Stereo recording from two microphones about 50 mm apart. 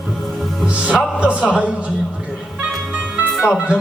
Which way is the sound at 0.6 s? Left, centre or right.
Right.